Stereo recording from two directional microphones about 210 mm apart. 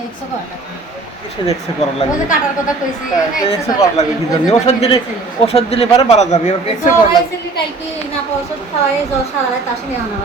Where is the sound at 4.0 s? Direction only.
30° left (ahead or behind).